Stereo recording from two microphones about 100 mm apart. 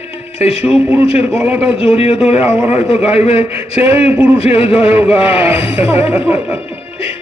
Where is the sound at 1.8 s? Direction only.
70° left (ahead or behind).